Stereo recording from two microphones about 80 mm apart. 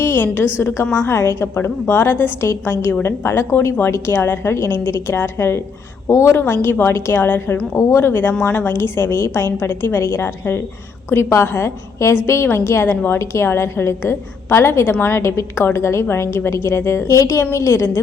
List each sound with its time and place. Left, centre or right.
0.0 s a sound: left
0.6 s a woman's voice: left
8.4 s a woman's voice: centre
8.6 s a woman's voice: left